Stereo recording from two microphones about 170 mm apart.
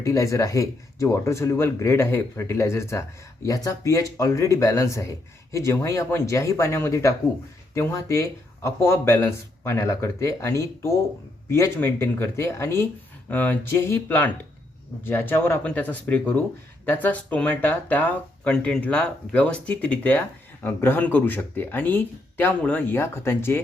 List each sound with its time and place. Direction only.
0.0 s speech: 20° left (ahead or behind)